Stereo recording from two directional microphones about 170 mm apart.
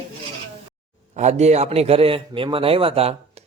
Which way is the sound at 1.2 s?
40° right (ahead or behind).